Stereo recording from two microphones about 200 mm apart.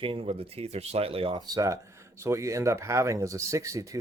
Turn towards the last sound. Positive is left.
turn(degrees=-15)  # may be behind; listen again after turning